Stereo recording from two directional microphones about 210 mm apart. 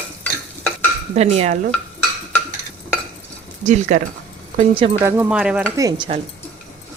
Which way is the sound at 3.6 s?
35° right (ahead or behind).